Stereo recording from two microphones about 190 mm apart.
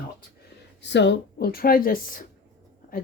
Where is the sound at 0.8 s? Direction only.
70° left (ahead or behind); by 2.2 s 50° left (ahead or behind).